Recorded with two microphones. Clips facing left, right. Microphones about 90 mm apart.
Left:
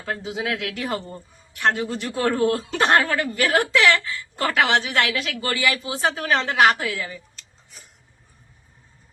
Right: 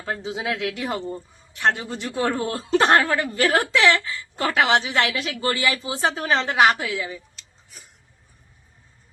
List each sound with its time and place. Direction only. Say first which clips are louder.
0.0 s speech: even; 25° right (ahead or behind)